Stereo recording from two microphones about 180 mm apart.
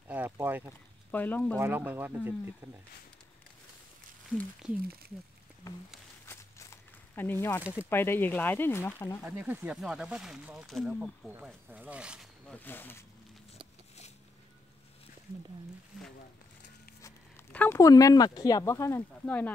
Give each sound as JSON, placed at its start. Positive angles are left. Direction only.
{"t": 0.1, "sound": "boat", "side_deg": -10}
{"t": 1.1, "sound": "speech", "side_deg": 10}
{"t": 1.6, "sound": "speech", "side_deg": -10}
{"t": 4.3, "sound": "speech", "side_deg": 0}
{"t": 6.2, "sound": "walk", "side_deg": 15}
{"t": 7.6, "sound": "speech", "side_deg": -5}
{"t": 7.9, "sound": "speech", "side_deg": 10}
{"t": 9.2, "sound": "speech", "side_deg": -10}
{"t": 12.5, "sound": "speech", "side_deg": 10}
{"t": 17.0, "sound": "speech", "side_deg": 10}